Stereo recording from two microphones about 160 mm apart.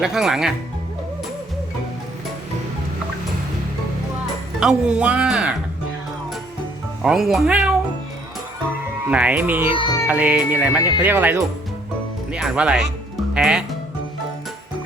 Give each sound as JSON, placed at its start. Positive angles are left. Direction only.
{"t": 0.0, "sound": "speech", "side_deg": -5}
{"t": 4.6, "sound": "speech", "side_deg": -5}
{"t": 7.0, "sound": "speech", "side_deg": -5}
{"t": 9.0, "sound": "speech", "side_deg": -10}
{"t": 9.7, "sound": "music", "side_deg": 30}
{"t": 10.1, "sound": "speech", "side_deg": -10}